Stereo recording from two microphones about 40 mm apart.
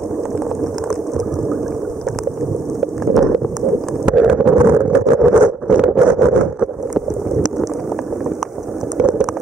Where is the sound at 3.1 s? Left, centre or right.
Centre.